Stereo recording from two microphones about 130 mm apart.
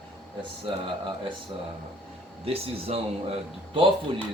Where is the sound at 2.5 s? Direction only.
50° right (ahead or behind).